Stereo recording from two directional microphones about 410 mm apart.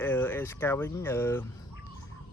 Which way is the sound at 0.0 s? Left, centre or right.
Centre.